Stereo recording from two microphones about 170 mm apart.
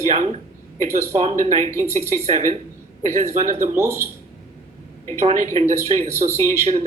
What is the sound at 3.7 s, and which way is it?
Speech, 15° right (ahead or behind).